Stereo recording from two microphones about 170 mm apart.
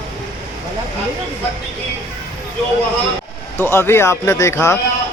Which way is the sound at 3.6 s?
15° left (ahead or behind).